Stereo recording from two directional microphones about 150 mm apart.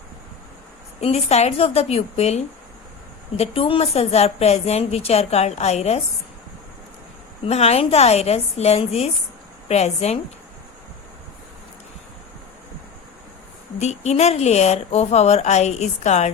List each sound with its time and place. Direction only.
1.0 s a woman's voice: 45° left (ahead or behind)
7.4 s a woman's voice: 45° left (ahead or behind)
13.7 s a woman's voice: 50° left (ahead or behind)